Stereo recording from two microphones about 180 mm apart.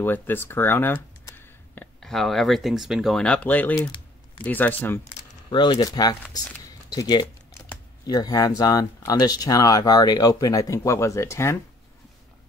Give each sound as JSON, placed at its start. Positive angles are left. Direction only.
{"t": 0.0, "sound": "speech", "side_deg": 10}
{"t": 5.5, "sound": "speech", "side_deg": 25}